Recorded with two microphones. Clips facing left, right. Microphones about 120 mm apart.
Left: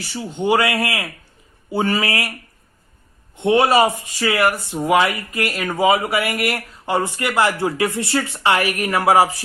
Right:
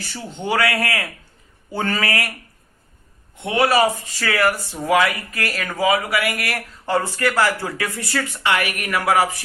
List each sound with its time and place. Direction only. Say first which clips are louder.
0.1 s speech: left 5 dB; 10° left (ahead or behind)
3.3 s speech: left 3 dB; 25° left (ahead or behind)